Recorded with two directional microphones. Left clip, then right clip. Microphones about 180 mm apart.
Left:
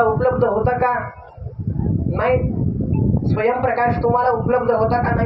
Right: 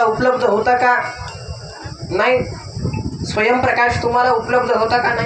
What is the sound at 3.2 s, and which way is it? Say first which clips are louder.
Speech: right 4 dB; 15° left (ahead or behind).